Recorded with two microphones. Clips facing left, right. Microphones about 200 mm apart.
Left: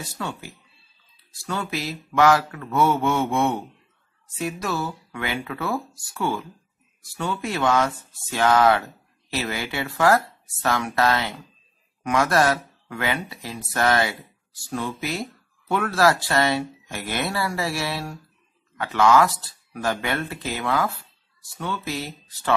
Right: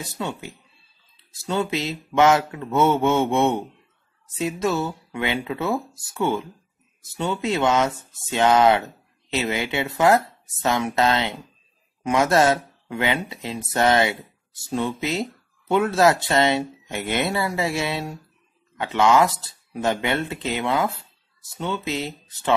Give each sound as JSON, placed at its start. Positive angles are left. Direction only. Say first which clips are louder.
{"t": 0.0, "sound": "speech", "louder": "right 2 dB", "side_deg": -20}